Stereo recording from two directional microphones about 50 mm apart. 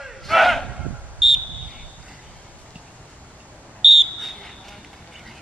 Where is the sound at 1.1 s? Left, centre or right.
Centre.